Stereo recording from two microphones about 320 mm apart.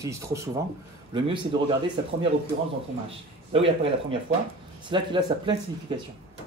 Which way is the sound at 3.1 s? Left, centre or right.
Centre.